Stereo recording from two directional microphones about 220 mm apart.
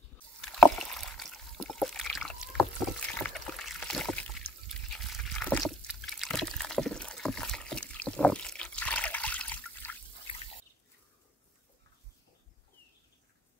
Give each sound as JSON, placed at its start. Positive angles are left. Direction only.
{"t": 0.4, "sound": "rowboat", "side_deg": 0}
{"t": 3.2, "sound": "trickle", "side_deg": 5}
{"t": 10.3, "sound": "drip", "side_deg": 25}